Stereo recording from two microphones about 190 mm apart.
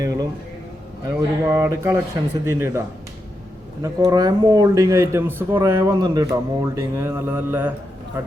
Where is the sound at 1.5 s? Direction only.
15° right (ahead or behind).